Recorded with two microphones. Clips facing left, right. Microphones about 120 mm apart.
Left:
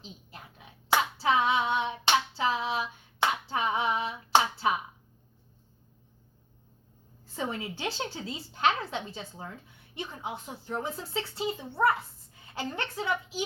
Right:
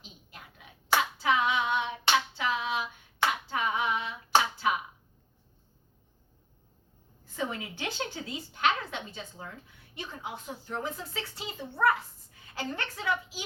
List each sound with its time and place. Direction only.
0.9 s hands: 30° left (ahead or behind)
3.2 s a sound: 30° left (ahead or behind)
7.3 s a woman's voice: 30° left (ahead or behind)